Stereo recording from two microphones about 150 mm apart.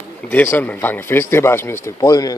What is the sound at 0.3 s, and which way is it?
Speech, 10° left (ahead or behind).